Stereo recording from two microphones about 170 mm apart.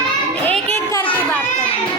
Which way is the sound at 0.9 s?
10° left (ahead or behind).